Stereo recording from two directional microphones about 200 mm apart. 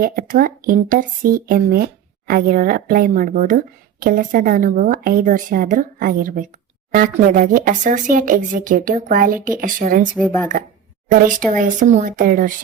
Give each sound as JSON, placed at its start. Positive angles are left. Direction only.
{"t": 0.0, "sound": "speech", "side_deg": -45}
{"t": 10.2, "sound": "speech", "side_deg": 5}
{"t": 11.5, "sound": "speech", "side_deg": -40}